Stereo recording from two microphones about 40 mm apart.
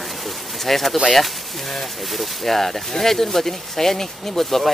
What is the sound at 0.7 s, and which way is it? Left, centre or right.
Speech, centre.